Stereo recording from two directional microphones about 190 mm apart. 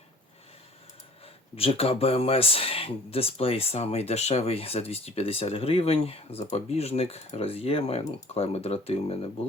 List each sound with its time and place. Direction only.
1.5 s speech: 30° left (ahead or behind)